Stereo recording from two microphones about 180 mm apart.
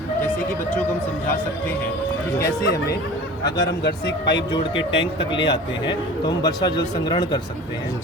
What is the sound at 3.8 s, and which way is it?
Speech, 75° left (ahead or behind).